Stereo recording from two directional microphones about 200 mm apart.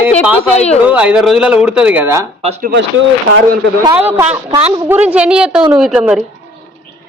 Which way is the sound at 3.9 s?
10° right (ahead or behind).